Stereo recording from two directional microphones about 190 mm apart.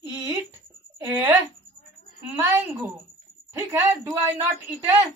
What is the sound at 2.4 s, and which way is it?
A woman's voice, 10° right (ahead or behind).